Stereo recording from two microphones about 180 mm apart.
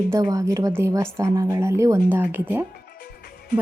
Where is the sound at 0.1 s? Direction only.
20° right (ahead or behind).